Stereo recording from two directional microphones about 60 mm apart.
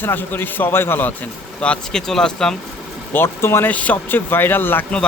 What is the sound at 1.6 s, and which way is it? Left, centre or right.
Speech, centre.